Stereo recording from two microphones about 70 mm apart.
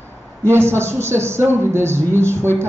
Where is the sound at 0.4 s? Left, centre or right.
Right.